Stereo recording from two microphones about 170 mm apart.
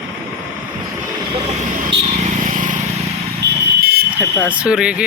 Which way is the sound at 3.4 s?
65° right (ahead or behind).